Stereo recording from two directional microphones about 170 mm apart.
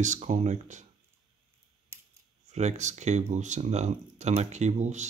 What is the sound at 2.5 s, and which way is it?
Speech, 40° right (ahead or behind).